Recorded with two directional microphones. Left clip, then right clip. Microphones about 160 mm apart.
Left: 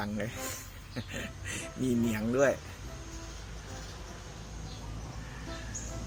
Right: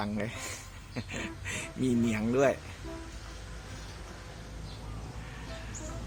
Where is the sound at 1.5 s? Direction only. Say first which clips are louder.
Right 1 dB; 25° right (ahead or behind).